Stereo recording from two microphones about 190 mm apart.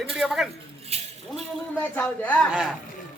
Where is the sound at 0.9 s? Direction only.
35° right (ahead or behind).